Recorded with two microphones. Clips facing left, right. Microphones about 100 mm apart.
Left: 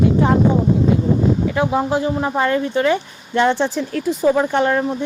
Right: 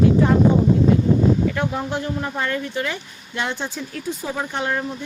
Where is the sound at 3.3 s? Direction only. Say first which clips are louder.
Left 10 dB; 60° left (ahead or behind).